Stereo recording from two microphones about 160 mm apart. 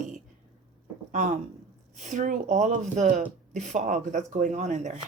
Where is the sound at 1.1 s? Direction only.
55° right (ahead or behind).